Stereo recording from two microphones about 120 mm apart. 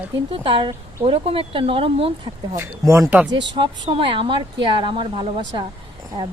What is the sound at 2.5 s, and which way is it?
Speech, 20° right (ahead or behind).